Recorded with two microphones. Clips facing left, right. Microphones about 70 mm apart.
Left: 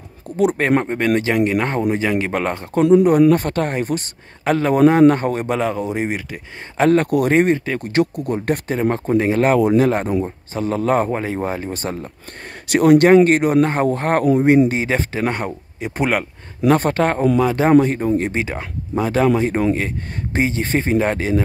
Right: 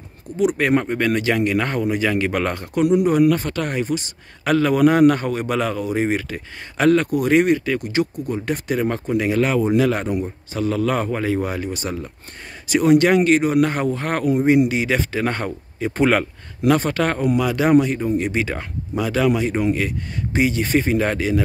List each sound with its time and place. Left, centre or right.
0.6 s a man's voice: left
4.5 s a man's voice: left
6.0 s speech: centre
6.8 s a man's voice: left
7.9 s speech: left
8.6 s a man's voice: left
12.6 s speech: left
13.6 s a man's voice: left
14.8 s a man's voice: left
15.2 s a man's voice: centre
17.0 s a man's voice: left
18.3 s a man's voice: left
19.0 s a man's voice: left